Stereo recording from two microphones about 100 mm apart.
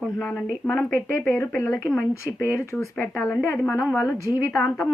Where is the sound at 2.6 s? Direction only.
30° left (ahead or behind).